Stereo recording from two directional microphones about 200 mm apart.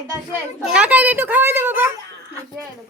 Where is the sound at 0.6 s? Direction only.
5° right (ahead or behind).